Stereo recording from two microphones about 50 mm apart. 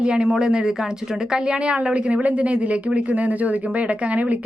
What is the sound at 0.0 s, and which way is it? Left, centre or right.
Speech, right.